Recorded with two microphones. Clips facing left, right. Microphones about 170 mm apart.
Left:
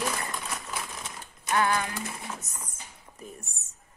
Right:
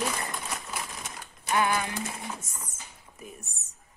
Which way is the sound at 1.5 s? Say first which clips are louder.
Even; 15° right (ahead or behind).